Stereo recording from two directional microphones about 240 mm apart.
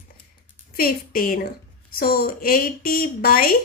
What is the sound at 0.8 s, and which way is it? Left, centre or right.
Speech, left.